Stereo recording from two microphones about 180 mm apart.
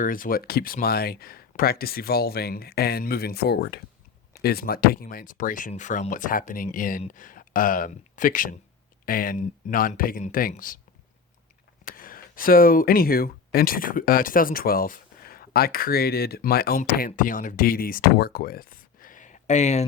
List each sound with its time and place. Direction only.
0.0 s speech: 50° left (ahead or behind)
11.9 s speech: 50° left (ahead or behind)